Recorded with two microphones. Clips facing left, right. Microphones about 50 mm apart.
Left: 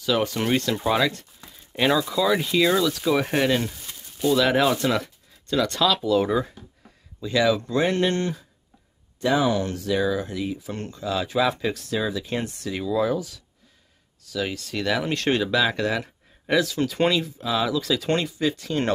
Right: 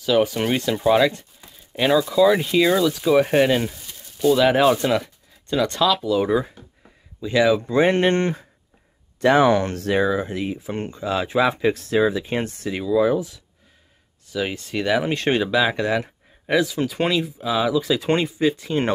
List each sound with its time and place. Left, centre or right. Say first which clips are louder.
0.0 s speech: right 4 dB; centre
3.7 s a sound: even; centre
4.4 s speech: right 3 dB; centre
7.2 s speech: right 3 dB; centre
7.8 s speech: right 5 dB; right
9.2 s speech: right 6 dB; right
10.0 s speech: right 3 dB; right
12.8 s speech: right 5 dB; centre
13.1 s speech: right 4 dB; right